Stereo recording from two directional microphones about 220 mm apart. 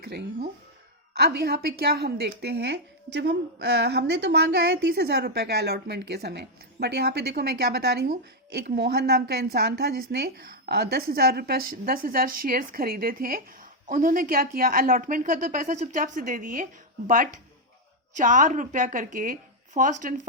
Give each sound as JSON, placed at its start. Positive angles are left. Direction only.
{"t": 0.0, "sound": "a woman's voice", "side_deg": -45}
{"t": 18.2, "sound": "a woman's voice", "side_deg": -35}